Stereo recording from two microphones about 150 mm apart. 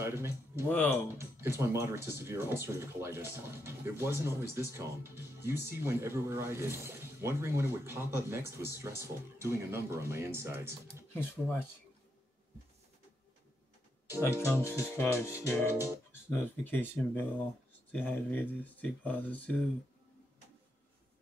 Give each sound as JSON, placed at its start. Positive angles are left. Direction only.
{"t": 0.0, "sound": "music", "side_deg": -15}
{"t": 0.7, "sound": "speech", "side_deg": 10}
{"t": 1.1, "sound": "speech", "side_deg": -15}
{"t": 11.1, "sound": "speech", "side_deg": 15}
{"t": 14.9, "sound": "speech", "side_deg": 15}
{"t": 15.3, "sound": "speech", "side_deg": -15}
{"t": 16.1, "sound": "speech", "side_deg": 15}